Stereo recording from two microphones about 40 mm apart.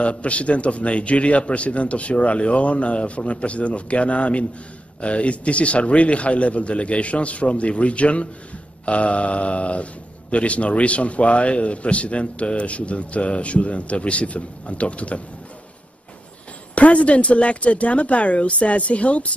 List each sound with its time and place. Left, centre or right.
0.0 s a man's voice: left
16.7 s a man's voice: left